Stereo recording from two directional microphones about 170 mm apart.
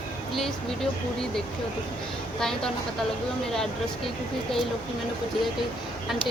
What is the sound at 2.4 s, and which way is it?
Speech, 5° left (ahead or behind).